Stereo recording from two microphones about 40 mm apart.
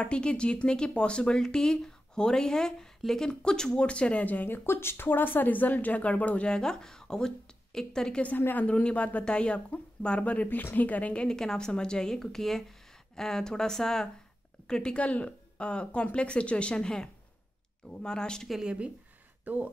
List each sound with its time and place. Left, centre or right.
0.0 s speech: left; by 3.3 s centre
3.3 s speech: centre
3.8 s speech: left
4.5 s speech: left
6.4 s a woman's voice: centre
8.5 s speech: left
10.5 s speech: left
10.9 s speech: left
11.2 s speech: centre
18.6 s speech: right
19.5 s speech: right